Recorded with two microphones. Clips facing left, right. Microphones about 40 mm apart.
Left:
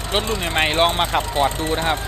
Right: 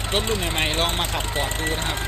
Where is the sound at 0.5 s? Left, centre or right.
Left.